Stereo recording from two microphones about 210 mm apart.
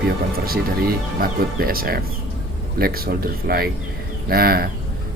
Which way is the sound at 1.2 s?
45° right (ahead or behind).